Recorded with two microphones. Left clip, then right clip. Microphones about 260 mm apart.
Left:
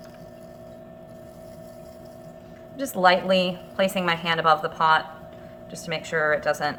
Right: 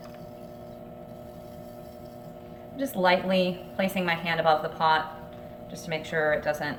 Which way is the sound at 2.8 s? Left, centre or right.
Centre.